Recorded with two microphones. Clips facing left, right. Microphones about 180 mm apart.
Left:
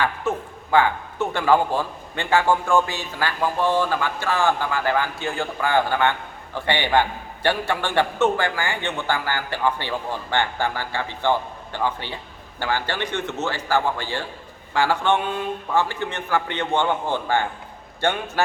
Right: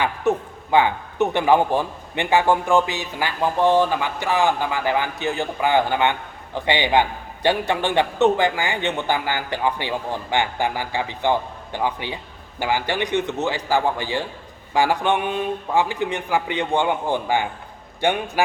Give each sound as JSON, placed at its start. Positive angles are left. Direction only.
{"t": 0.0, "sound": "a man's voice", "side_deg": -20}